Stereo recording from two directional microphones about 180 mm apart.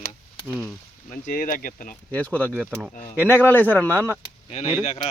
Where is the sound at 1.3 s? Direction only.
50° left (ahead or behind).